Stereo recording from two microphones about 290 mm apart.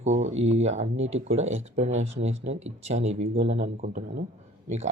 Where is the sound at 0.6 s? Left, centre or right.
Right.